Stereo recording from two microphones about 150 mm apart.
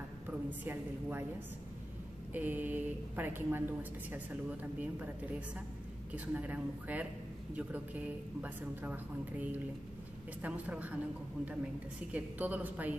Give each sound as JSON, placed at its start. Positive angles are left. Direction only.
{"t": 0.3, "sound": "speech", "side_deg": -10}
{"t": 2.3, "sound": "speech", "side_deg": -10}
{"t": 6.1, "sound": "speech", "side_deg": -10}
{"t": 12.1, "sound": "speech", "side_deg": -10}